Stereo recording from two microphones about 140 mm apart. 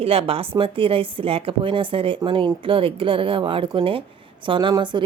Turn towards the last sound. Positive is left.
turn(degrees=-35)  # may be behind; listen again after turning